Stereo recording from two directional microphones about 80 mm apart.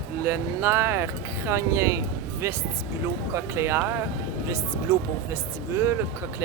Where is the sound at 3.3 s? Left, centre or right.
Right.